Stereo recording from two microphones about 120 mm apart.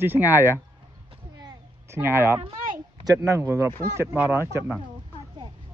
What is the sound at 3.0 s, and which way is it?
Speech, 25° right (ahead or behind).